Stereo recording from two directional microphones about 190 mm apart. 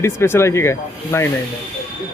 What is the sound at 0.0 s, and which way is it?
Speech, 15° left (ahead or behind).